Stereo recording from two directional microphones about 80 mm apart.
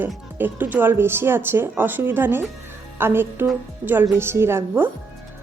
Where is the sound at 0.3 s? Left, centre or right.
Right.